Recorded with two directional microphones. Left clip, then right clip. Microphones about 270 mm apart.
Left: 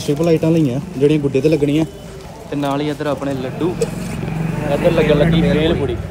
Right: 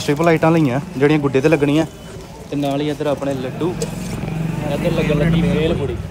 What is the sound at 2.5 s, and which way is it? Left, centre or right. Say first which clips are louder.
Speech: left 1 dB; centre.